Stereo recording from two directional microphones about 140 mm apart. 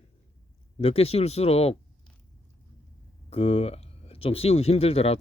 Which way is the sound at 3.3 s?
45° left (ahead or behind).